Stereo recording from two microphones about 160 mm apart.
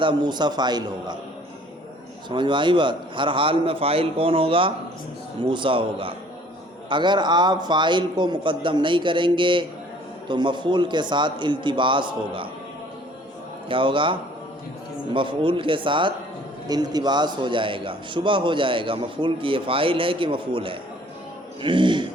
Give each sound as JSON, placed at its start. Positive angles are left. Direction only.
{"t": 0.0, "sound": "a man's voice", "side_deg": -30}
{"t": 2.3, "sound": "a man's voice", "side_deg": -30}
{"t": 13.7, "sound": "a man's voice", "side_deg": -30}